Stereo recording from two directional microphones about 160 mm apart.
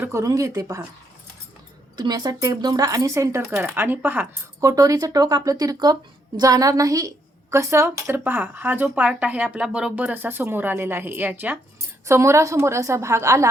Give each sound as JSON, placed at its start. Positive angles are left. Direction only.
{"t": 0.0, "sound": "speech", "side_deg": -15}
{"t": 2.0, "sound": "speech", "side_deg": -25}